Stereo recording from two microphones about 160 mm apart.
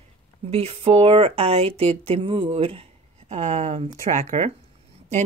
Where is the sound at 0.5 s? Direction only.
40° right (ahead or behind).